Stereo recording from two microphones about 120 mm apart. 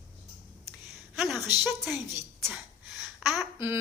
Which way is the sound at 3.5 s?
20° right (ahead or behind).